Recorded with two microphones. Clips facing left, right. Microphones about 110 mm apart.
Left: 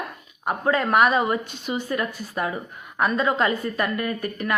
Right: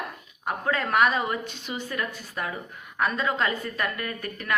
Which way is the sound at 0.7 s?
15° left (ahead or behind).